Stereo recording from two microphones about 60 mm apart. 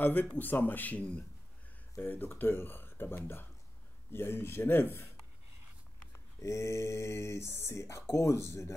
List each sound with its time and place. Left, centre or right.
0.0 s speech: left
2.0 s speech: left
6.1 s speech: left